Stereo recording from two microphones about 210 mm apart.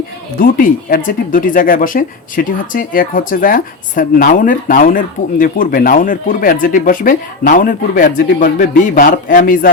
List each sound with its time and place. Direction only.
0.3 s speech: 40° left (ahead or behind)